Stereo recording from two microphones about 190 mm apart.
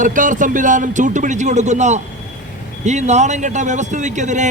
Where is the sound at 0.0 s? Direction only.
45° right (ahead or behind).